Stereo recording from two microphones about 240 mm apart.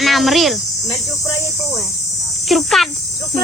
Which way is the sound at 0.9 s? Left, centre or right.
Centre.